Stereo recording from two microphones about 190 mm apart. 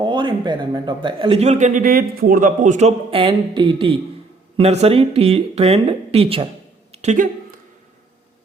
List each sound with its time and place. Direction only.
0.0 s a man's voice: 25° right (ahead or behind)